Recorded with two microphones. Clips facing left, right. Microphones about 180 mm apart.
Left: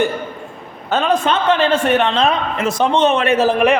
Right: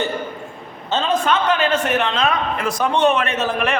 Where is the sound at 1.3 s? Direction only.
30° left (ahead or behind).